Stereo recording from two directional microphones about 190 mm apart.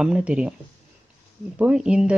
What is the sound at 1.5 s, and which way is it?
Speech, 5° right (ahead or behind).